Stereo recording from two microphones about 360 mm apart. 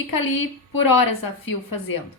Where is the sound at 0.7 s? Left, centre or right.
Left.